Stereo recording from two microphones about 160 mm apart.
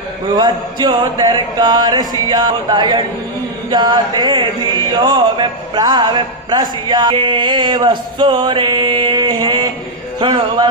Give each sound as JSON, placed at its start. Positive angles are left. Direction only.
{"t": 0.3, "sound": "music", "side_deg": -30}
{"t": 10.2, "sound": "speech", "side_deg": -35}